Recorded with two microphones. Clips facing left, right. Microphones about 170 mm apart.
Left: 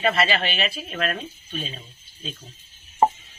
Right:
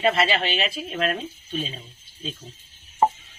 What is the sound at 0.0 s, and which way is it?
Speech, 20° right (ahead or behind).